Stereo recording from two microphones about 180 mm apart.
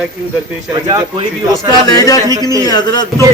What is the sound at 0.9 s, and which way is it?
Speech, 20° right (ahead or behind).